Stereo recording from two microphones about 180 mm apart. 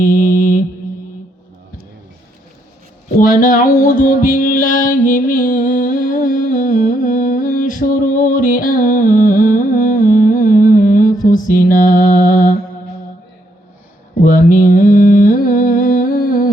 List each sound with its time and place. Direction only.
0.0 s mantra: 50° left (ahead or behind)
3.2 s music: 50° left (ahead or behind)
14.2 s mantra: 50° left (ahead or behind)